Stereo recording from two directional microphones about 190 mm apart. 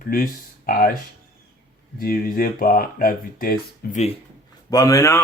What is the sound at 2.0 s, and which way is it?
Speech, 50° left (ahead or behind).